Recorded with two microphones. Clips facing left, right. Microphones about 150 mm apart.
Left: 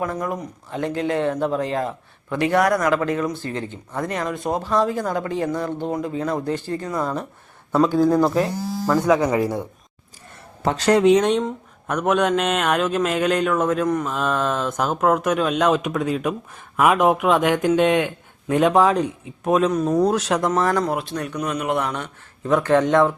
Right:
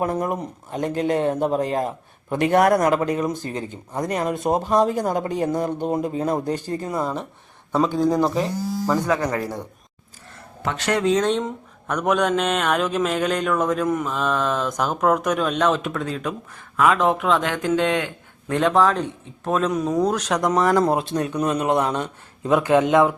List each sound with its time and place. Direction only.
0.0 s speech: 30° right (ahead or behind)
0.8 s speech: 15° right (ahead or behind)
1.5 s speech: 35° right (ahead or behind)
2.4 s speech: 45° right (ahead or behind)
2.7 s speech: 30° right (ahead or behind)
3.1 s speech: 20° right (ahead or behind)
6.4 s speech: 15° right (ahead or behind)
7.0 s speech: 5° right (ahead or behind)
9.0 s speech: 15° left (ahead or behind)
10.6 s speech: 35° left (ahead or behind)
11.0 s speech: 15° left (ahead or behind)
11.3 s speech: 5° left (ahead or behind)
20.5 s speech: 15° right (ahead or behind)